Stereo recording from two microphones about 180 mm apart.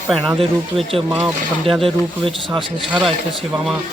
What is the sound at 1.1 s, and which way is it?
Speech, 10° right (ahead or behind).